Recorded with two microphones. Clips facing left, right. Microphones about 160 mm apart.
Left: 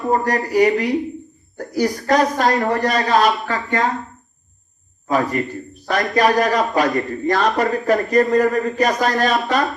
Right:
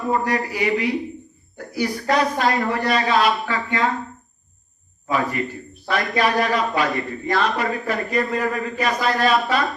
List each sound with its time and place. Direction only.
0.1 s a man's voice: 40° left (ahead or behind)
5.0 s a man's voice: 40° left (ahead or behind)